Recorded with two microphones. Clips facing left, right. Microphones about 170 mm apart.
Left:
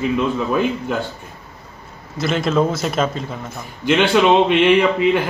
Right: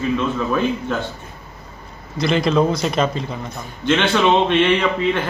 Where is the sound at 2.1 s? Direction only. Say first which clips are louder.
Right 1 dB; centre (ahead or behind).